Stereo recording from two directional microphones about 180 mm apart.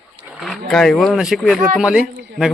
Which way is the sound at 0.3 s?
Centre (ahead or behind).